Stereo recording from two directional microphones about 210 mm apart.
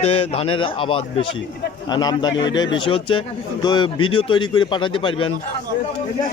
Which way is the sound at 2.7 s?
25° left (ahead or behind).